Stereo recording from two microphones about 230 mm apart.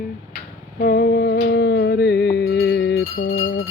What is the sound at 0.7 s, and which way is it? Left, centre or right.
Music, left.